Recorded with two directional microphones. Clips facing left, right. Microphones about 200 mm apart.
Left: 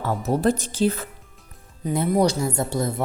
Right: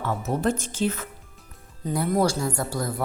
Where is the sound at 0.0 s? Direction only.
35° left (ahead or behind).